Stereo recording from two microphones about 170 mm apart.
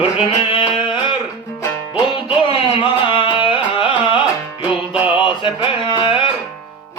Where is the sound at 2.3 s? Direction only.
30° left (ahead or behind).